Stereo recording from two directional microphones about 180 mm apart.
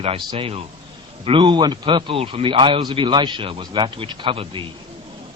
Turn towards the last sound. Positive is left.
turn(degrees=-30)  # may be behind; listen again after turning